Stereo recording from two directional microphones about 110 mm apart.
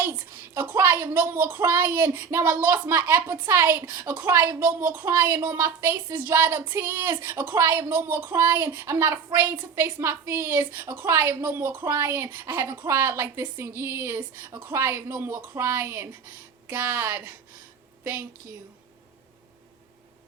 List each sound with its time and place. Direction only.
0.0 s a woman's voice: 20° right (ahead or behind)